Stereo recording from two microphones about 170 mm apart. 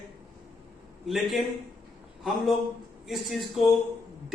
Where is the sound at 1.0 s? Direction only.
Centre (ahead or behind).